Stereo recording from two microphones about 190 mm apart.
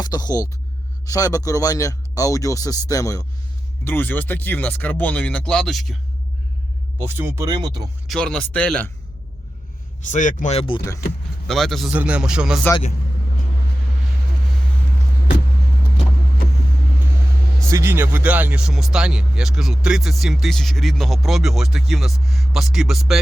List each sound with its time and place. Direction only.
0.0 s speech: 20° left (ahead or behind); by 6.0 s centre (ahead or behind)
7.0 s speech: 10° right (ahead or behind)
8.0 s speech: 5° left (ahead or behind)
10.1 s speech: 40° left (ahead or behind)
10.8 s speech: 15° left (ahead or behind)
11.4 s speech: centre (ahead or behind)
17.7 s speech: 15° right (ahead or behind)